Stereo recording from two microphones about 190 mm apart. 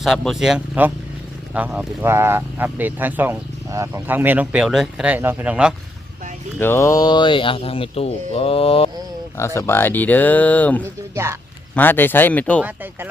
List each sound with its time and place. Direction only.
0.0 s speech: centre (ahead or behind)
6.6 s speech: 15° left (ahead or behind); by 8.9 s 30° left (ahead or behind)
9.6 s speech: 10° left (ahead or behind)
11.1 s speech: 15° right (ahead or behind)
11.7 s speech: 10° left (ahead or behind)
12.6 s speech: 10° right (ahead or behind)